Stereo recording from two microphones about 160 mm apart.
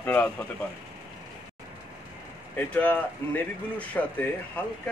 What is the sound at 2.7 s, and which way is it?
Speech, 10° left (ahead or behind).